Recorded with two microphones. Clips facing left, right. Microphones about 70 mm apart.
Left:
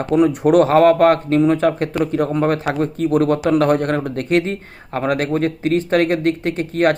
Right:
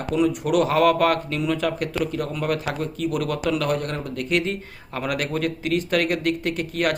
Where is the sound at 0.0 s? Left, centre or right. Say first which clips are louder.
Left 7 dB; left.